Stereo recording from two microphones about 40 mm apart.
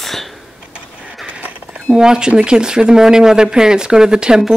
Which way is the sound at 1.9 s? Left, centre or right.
Centre.